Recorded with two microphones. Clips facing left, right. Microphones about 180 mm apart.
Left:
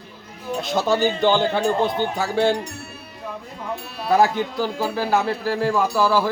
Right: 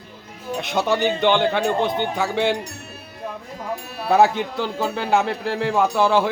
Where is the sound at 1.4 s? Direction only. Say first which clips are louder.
Even; 20° right (ahead or behind).